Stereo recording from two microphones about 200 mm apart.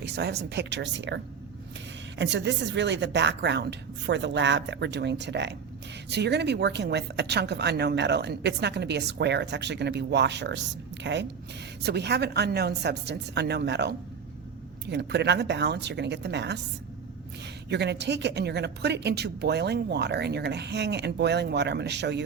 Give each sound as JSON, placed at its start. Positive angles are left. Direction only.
{"t": 0.0, "sound": "speech", "side_deg": -55}